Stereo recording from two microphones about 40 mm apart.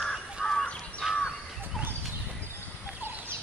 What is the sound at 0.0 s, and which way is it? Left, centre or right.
Crow, centre.